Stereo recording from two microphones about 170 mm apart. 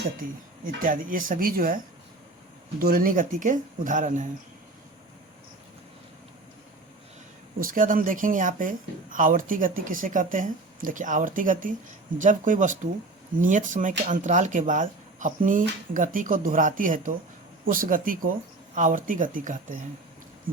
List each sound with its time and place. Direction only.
0.2 s speech: 55° right (ahead or behind)
7.6 s speech: 55° right (ahead or behind)